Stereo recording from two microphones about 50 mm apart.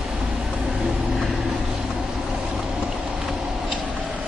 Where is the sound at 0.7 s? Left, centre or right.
Centre.